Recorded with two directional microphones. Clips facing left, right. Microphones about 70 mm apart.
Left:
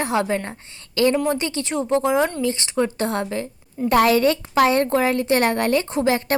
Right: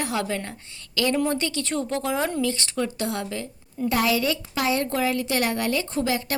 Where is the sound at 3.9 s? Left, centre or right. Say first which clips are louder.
Left 7 dB; left.